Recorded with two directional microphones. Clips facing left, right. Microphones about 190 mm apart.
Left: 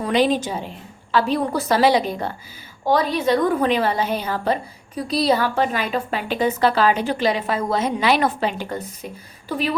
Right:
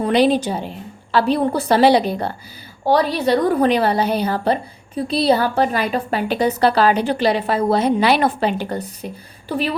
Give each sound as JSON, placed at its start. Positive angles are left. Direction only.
{"t": 0.0, "sound": "a woman's voice", "side_deg": -35}